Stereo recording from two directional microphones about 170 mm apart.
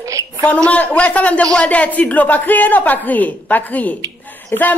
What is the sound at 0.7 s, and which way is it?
A man's voice, 10° left (ahead or behind).